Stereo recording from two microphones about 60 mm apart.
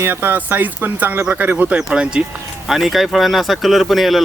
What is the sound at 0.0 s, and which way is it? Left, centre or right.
Speech, right.